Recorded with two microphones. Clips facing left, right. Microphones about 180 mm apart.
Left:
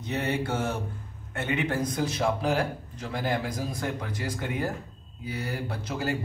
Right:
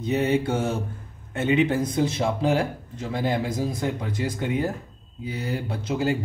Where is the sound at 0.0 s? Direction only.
20° right (ahead or behind).